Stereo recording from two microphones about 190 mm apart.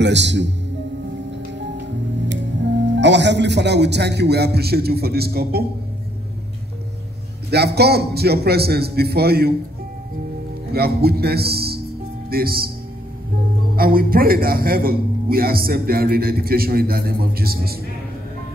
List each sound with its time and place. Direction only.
0.0 s a man's voice: 65° right (ahead or behind)
3.0 s a man's voice: 65° right (ahead or behind)
7.5 s a man's voice: 60° right (ahead or behind)
10.7 s a man's voice: 55° right (ahead or behind)
13.7 s a man's voice: 50° right (ahead or behind)